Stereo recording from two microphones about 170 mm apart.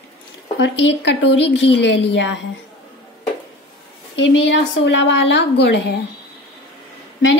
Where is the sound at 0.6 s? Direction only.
90° left.